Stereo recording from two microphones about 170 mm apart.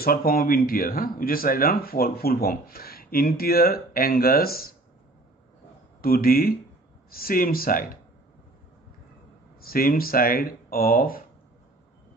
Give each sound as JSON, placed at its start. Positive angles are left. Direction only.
{"t": 0.0, "sound": "speech", "side_deg": 60}
{"t": 5.9, "sound": "speech", "side_deg": 60}
{"t": 9.7, "sound": "speech", "side_deg": 60}